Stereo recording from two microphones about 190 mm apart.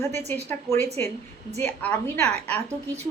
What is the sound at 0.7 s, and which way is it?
Speech, 35° right (ahead or behind).